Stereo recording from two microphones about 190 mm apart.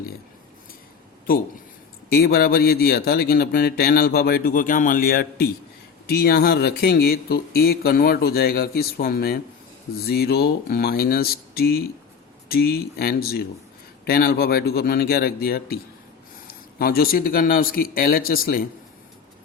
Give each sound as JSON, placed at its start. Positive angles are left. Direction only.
{"t": 2.1, "sound": "speech", "side_deg": 55}